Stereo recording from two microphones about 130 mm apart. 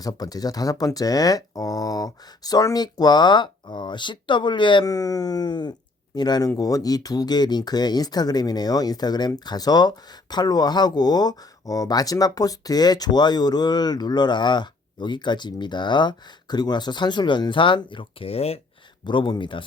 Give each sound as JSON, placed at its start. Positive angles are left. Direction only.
{"t": 0.0, "sound": "speech", "side_deg": 30}
{"t": 19.0, "sound": "speech", "side_deg": 35}